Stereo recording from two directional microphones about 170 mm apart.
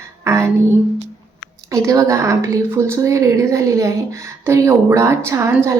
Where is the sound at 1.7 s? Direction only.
20° right (ahead or behind).